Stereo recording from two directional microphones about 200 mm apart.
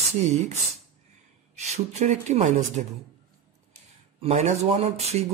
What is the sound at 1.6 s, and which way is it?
Speech, 35° right (ahead or behind).